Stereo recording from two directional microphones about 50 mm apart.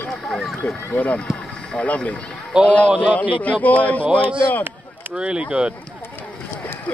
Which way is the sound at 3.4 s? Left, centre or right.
Left.